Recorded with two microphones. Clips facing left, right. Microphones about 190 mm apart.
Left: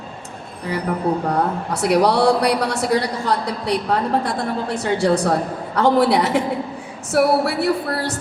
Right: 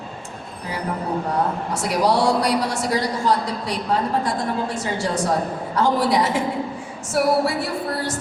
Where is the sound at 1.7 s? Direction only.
65° left (ahead or behind).